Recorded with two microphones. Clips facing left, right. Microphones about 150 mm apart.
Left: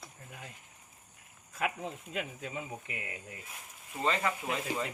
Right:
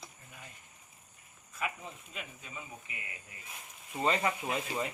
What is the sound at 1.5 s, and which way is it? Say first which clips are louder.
Speech: left 4 dB; 85° left.